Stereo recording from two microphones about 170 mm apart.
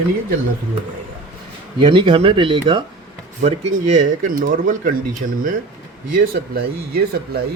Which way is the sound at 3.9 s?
50° right (ahead or behind).